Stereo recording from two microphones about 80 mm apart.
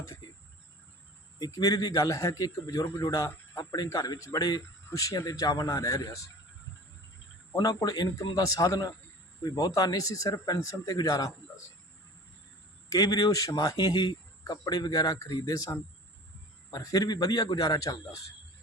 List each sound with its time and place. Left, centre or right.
1.4 s a man's voice: left
7.5 s a man's voice: left
12.9 s a man's voice: left